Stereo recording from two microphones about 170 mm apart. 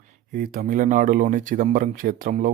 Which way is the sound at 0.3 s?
60° right (ahead or behind).